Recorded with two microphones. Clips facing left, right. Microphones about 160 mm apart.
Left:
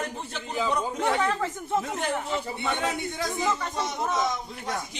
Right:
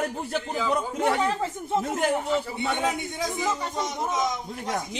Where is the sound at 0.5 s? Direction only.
20° left (ahead or behind).